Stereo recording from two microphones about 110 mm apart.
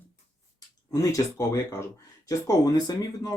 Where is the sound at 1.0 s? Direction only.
25° left (ahead or behind).